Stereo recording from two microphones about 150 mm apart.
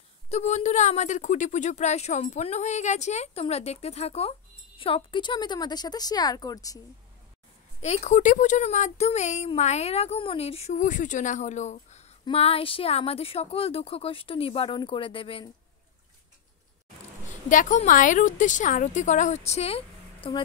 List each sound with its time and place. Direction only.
0.3 s a woman's voice: 45° left (ahead or behind); by 6.8 s 25° left (ahead or behind)
7.8 s a woman's voice: 50° left (ahead or behind)
17.5 s speech: 60° left (ahead or behind); by 20.4 s 35° left (ahead or behind)